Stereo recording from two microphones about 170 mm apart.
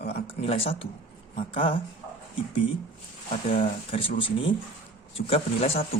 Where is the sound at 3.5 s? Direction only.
30° left (ahead or behind).